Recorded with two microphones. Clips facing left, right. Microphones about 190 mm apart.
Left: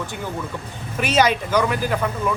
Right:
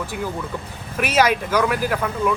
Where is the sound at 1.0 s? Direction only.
5° right (ahead or behind).